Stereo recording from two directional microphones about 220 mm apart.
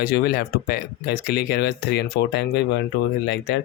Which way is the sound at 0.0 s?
45° left (ahead or behind).